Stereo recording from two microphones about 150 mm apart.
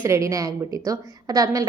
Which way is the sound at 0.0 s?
20° right (ahead or behind).